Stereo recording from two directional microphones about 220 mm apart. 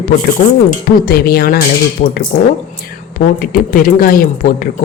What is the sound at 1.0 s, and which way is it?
A woman's voice, 45° left (ahead or behind).